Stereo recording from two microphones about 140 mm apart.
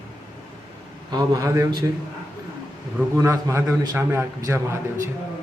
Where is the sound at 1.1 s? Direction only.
30° right (ahead or behind).